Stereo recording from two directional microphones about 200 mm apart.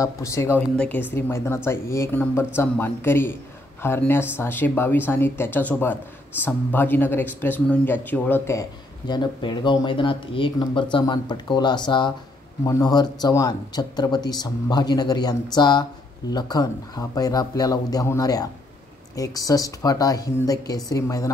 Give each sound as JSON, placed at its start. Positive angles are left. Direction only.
{"t": 0.0, "sound": "speech", "side_deg": 15}